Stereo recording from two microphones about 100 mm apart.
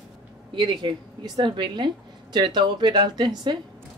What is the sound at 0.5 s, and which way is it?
Speech, 55° right (ahead or behind).